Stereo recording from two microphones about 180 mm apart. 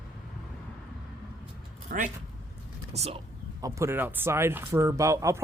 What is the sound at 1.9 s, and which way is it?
Speech, 45° right (ahead or behind).